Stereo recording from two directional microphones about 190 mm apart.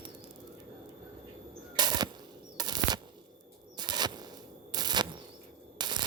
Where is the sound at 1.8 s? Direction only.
20° right (ahead or behind).